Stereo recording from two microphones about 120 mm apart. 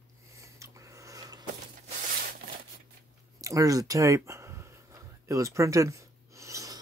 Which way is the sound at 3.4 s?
30° right (ahead or behind).